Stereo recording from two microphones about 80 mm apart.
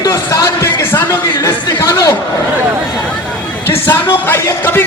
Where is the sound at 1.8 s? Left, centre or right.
Left.